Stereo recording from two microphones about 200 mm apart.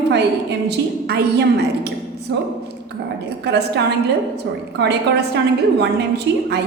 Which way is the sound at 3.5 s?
55° right (ahead or behind).